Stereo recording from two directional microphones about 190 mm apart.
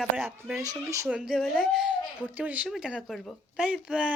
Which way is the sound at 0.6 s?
20° right (ahead or behind).